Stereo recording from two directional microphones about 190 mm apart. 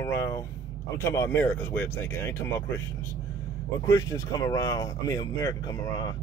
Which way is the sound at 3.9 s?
15° left (ahead or behind).